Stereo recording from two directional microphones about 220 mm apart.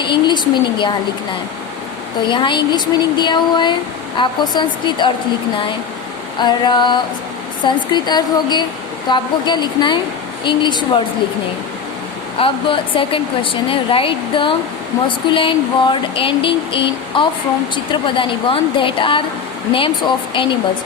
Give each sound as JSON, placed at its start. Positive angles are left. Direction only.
{"t": 0.0, "sound": "speech", "side_deg": 20}
{"t": 2.3, "sound": "speech", "side_deg": 20}
{"t": 6.4, "sound": "speech", "side_deg": 20}
{"t": 12.4, "sound": "speech", "side_deg": 25}